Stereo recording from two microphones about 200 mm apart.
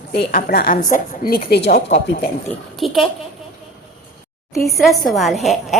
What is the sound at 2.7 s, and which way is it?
Speech, centre (ahead or behind).